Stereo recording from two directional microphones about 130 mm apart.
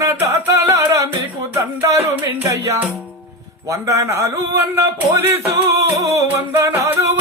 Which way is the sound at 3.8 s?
25° right (ahead or behind).